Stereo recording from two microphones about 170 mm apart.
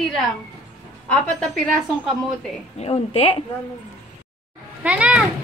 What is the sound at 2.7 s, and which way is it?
Speech, 35° left (ahead or behind).